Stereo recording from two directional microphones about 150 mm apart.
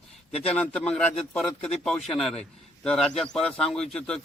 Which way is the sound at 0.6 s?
10° left (ahead or behind).